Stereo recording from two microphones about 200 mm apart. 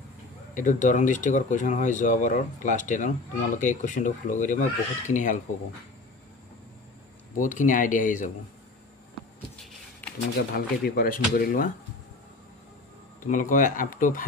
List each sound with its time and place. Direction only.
0.6 s speech: 40° left (ahead or behind)
7.3 s speech: 40° left (ahead or behind)
10.5 s speech: 45° left (ahead or behind)
13.2 s speech: 40° left (ahead or behind)